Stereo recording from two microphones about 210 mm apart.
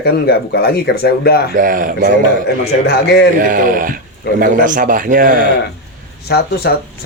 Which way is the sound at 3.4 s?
40° right (ahead or behind).